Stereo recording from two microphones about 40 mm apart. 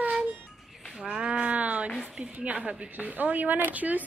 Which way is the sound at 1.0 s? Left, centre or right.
Right.